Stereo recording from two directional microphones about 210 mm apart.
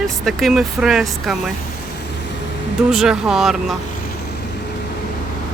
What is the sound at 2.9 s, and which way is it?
Speech, centre (ahead or behind).